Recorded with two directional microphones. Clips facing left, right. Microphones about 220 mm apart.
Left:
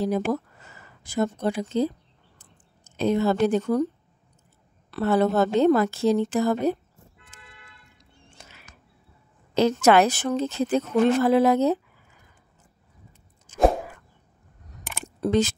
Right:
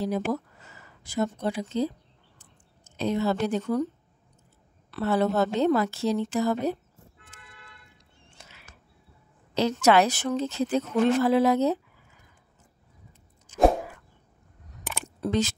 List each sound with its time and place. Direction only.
0.0 s speech: 50° left (ahead or behind)
4.9 s speech: 50° left (ahead or behind)
8.4 s a sound: 50° left (ahead or behind)
9.5 s speech: 50° left (ahead or behind)
13.5 s a sound: 50° left (ahead or behind)
15.1 s speech: 45° left (ahead or behind)